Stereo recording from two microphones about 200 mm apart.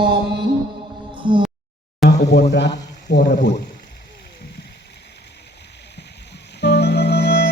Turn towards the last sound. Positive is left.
turn(degrees=55)  # may be behind; listen again after turning